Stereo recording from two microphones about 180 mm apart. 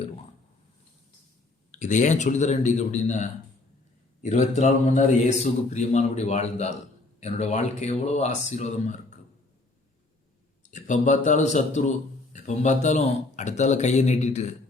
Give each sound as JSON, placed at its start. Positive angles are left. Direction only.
{"t": 1.8, "sound": "a man's voice", "side_deg": 45}
{"t": 10.6, "sound": "a man's voice", "side_deg": 45}